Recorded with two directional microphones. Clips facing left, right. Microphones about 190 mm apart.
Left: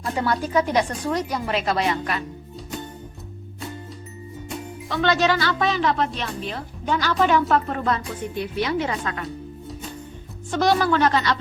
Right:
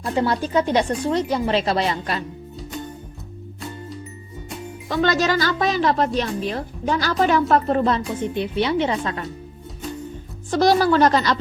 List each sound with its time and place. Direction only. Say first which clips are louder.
0.2 s a woman's voice: right 2 dB; 30° right (ahead or behind)
4.9 s a woman's voice: right 1 dB; 40° right (ahead or behind)
10.5 s a woman's voice: right 3 dB; 35° right (ahead or behind)